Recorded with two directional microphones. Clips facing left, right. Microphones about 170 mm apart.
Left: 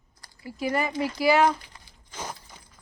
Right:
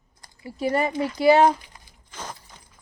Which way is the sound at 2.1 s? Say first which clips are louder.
Left 1 dB; 10° left (ahead or behind).